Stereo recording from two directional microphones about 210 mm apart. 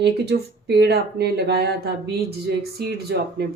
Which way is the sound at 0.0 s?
50° right (ahead or behind).